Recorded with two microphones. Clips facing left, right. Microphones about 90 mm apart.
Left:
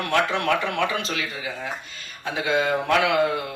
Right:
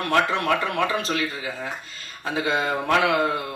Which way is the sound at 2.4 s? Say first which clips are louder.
Left 1 dB; 30° right (ahead or behind).